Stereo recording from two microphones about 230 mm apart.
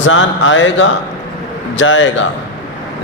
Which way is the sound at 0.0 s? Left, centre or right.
Left.